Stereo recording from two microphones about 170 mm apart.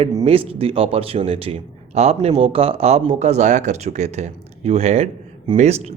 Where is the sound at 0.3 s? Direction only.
35° right (ahead or behind).